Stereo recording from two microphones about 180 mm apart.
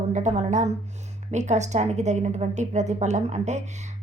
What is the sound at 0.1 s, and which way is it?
A woman's voice, 40° right (ahead or behind).